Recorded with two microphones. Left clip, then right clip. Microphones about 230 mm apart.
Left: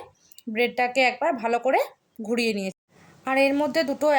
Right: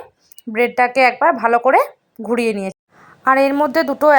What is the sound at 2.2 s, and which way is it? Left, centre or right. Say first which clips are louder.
Speech: right 8 dB; right.